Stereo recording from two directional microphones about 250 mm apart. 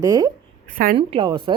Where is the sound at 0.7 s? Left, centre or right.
Right.